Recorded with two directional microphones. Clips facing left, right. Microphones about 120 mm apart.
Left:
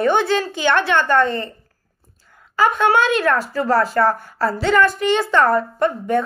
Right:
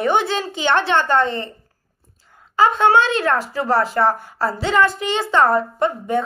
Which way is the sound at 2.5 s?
20° right (ahead or behind).